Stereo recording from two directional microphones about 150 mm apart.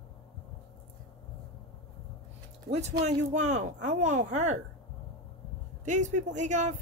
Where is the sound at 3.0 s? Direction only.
55° right (ahead or behind).